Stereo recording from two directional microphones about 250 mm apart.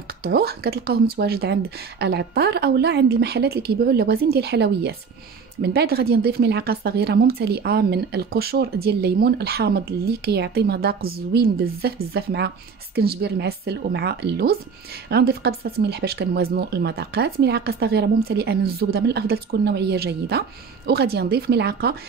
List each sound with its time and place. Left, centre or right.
0.2 s speech: right